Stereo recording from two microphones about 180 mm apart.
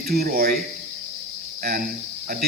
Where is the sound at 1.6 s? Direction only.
50° right (ahead or behind).